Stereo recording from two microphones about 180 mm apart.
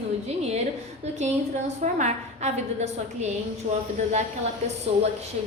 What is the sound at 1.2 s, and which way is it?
A woman's voice, 40° right (ahead or behind).